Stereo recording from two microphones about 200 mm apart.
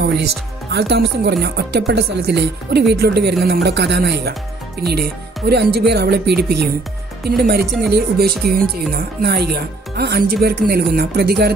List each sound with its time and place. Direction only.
0.7 s speech: 55° right (ahead or behind)